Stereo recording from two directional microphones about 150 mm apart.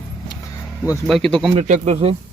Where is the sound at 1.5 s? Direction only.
50° right (ahead or behind).